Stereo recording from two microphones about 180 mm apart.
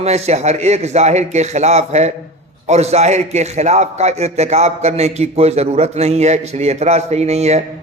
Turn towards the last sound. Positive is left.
turn(degrees=-35)  # may be behind; listen again after turning